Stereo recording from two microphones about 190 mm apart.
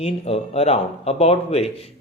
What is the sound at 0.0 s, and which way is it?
A man's voice, 35° left (ahead or behind).